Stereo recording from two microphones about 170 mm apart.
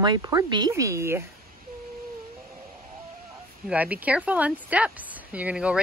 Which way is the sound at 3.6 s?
10° right (ahead or behind).